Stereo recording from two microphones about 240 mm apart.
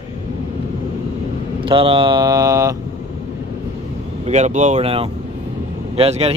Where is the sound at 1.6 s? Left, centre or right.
Right.